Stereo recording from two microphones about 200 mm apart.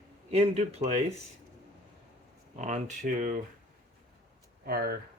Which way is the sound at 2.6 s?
35° right (ahead or behind).